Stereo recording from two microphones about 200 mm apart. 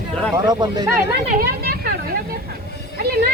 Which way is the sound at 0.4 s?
20° right (ahead or behind).